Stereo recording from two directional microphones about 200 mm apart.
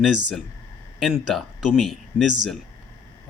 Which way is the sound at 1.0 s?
Centre (ahead or behind).